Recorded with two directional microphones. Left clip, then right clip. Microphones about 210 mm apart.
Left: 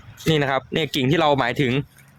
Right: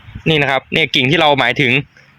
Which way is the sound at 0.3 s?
15° right (ahead or behind).